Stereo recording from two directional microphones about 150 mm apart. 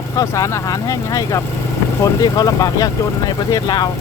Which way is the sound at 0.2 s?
20° left (ahead or behind).